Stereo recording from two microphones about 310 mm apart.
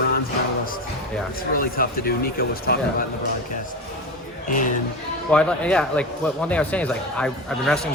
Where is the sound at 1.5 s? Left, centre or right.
Left.